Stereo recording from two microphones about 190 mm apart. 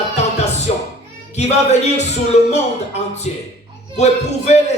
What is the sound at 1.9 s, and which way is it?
A man's voice, 35° left (ahead or behind).